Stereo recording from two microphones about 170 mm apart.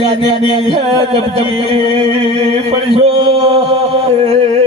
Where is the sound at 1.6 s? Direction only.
35° right (ahead or behind).